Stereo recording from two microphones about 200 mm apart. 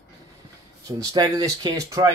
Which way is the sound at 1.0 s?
20° right (ahead or behind).